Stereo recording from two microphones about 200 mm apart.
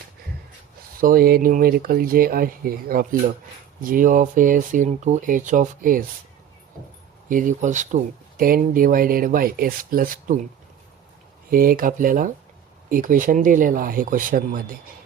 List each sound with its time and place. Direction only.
0.9 s speech: 45° right (ahead or behind)
7.3 s speech: 40° right (ahead or behind)
11.5 s speech: 45° right (ahead or behind)